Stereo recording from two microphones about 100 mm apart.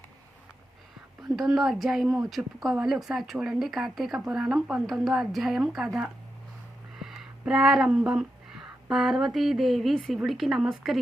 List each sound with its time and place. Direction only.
1.4 s speech: centre (ahead or behind)